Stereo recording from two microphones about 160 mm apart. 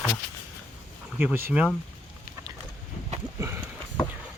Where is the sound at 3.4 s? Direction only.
15° right (ahead or behind).